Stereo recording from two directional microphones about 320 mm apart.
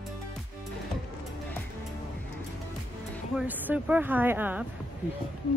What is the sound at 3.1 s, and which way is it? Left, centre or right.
Speech, centre.